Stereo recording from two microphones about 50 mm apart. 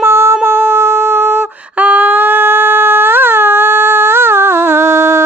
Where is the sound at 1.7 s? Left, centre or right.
Right.